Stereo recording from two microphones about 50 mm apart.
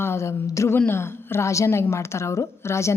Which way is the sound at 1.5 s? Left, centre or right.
Left.